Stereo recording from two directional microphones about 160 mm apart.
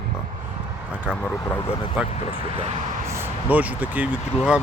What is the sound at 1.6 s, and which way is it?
Speech, 35° left (ahead or behind).